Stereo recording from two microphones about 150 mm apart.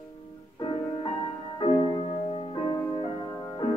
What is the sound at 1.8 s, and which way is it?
Music, 35° left (ahead or behind).